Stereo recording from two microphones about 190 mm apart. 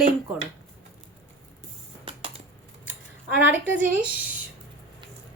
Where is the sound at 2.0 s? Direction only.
30° right (ahead or behind).